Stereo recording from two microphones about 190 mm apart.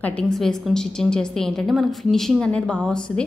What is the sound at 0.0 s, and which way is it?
A woman's voice, 5° left (ahead or behind).